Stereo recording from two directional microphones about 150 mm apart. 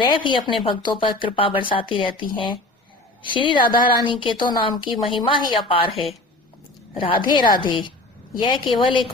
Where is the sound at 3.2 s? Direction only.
35° left (ahead or behind).